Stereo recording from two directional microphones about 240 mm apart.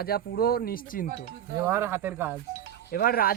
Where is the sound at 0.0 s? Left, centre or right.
Left.